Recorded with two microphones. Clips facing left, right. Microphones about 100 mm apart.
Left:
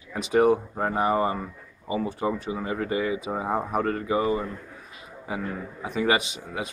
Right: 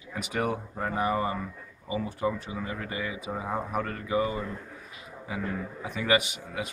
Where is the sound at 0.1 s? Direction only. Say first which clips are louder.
Left 10 dB; 35° left (ahead or behind).